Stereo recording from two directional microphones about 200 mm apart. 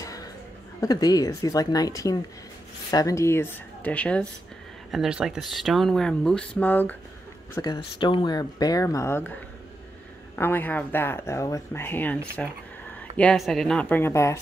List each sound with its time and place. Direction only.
0.0 s chuckle: 15° left (ahead or behind)
0.7 s speech: 20° left (ahead or behind)
7.6 s speech: 20° left (ahead or behind)